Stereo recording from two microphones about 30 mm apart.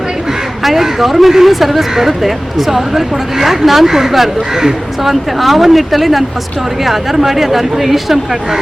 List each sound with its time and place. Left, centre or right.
0.6 s speech: centre
5.4 s speech: centre